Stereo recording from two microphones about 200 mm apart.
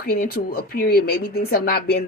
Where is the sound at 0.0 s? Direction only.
50° left (ahead or behind).